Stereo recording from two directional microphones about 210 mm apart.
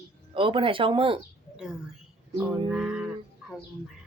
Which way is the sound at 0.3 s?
25° right (ahead or behind).